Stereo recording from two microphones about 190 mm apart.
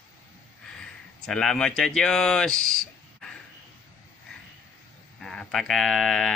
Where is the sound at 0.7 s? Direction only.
5° left (ahead or behind).